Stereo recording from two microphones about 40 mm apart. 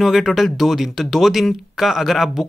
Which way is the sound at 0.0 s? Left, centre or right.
Centre.